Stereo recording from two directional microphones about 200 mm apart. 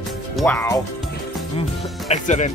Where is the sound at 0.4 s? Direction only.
10° left (ahead or behind).